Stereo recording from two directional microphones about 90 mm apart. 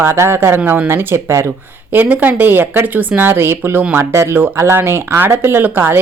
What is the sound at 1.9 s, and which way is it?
Speech, 20° right (ahead or behind).